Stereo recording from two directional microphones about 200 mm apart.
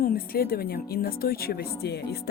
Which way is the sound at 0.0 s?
50° left (ahead or behind).